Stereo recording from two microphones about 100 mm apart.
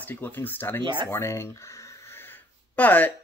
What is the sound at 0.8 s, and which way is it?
Speech, 55° right (ahead or behind).